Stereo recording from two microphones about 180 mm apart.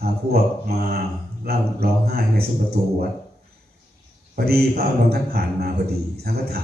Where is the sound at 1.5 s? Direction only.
60° right (ahead or behind).